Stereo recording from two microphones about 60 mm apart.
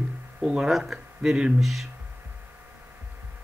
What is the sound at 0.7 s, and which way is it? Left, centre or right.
Speech, centre.